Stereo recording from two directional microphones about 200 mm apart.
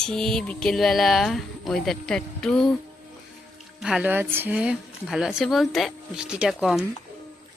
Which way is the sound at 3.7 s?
Centre (ahead or behind).